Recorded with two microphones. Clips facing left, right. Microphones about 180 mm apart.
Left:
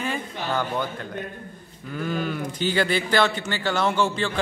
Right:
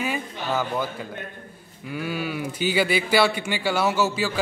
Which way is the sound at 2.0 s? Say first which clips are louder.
Left 1 dB; 10° right (ahead or behind).